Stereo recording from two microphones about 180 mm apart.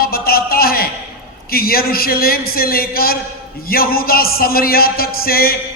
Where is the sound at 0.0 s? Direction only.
55° left (ahead or behind).